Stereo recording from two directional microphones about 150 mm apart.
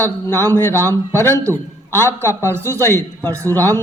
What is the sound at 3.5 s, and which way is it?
Speech, 15° left (ahead or behind).